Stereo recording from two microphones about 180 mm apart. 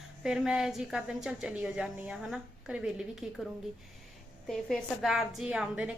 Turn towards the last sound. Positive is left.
turn(degrees=-5)  # may be behind; listen again after turning